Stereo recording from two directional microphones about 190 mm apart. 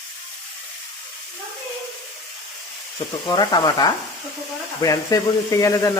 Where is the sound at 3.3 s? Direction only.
20° left (ahead or behind).